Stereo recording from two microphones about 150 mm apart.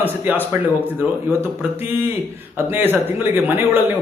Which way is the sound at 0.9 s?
15° right (ahead or behind).